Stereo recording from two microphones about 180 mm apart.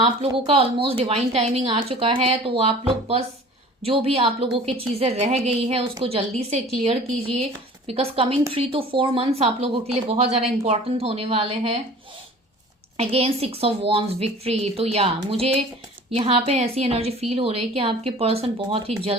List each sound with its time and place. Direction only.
0.0 s speech: 35° right (ahead or behind)
13.0 s speech: 35° right (ahead or behind)